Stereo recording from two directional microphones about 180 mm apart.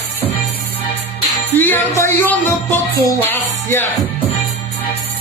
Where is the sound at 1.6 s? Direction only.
15° left (ahead or behind).